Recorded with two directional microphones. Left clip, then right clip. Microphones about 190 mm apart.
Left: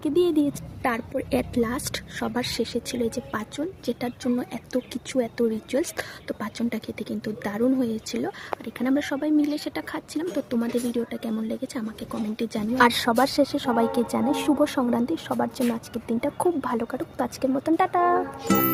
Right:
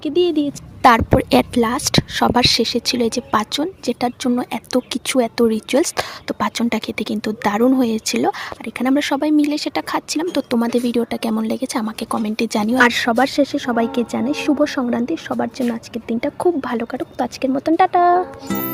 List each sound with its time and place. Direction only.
0.0 s speech: 15° right (ahead or behind)
0.8 s a woman's voice: 55° right (ahead or behind)
12.7 s speech: 20° right (ahead or behind)
18.4 s speech: centre (ahead or behind)